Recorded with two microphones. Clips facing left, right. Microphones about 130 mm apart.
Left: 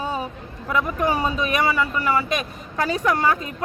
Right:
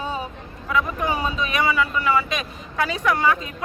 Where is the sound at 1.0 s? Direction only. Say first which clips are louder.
Left 2 dB; 40° left (ahead or behind).